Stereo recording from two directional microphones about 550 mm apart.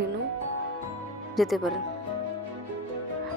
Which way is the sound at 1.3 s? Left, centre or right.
Centre.